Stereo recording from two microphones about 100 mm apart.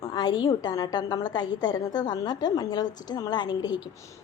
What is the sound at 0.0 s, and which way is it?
A woman's voice, 40° left (ahead or behind).